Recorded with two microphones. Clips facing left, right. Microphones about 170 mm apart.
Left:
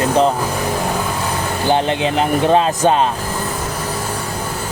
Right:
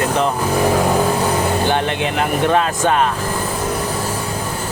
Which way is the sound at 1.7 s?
25° left (ahead or behind).